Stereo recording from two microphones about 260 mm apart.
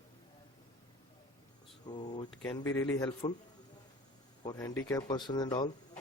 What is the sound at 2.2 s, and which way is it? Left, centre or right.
Speech, centre.